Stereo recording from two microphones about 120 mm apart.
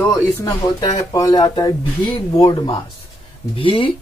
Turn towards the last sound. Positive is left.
turn(degrees=50)  # may be behind; listen again after turning